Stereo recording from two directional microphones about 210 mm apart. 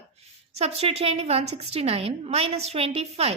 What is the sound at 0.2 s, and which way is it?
A woman's voice, 30° right (ahead or behind).